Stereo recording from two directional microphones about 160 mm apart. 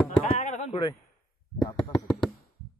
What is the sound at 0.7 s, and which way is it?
Speech, 30° left (ahead or behind).